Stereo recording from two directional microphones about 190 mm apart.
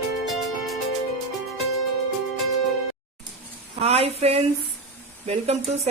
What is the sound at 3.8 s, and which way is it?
A woman's voice, 35° right (ahead or behind).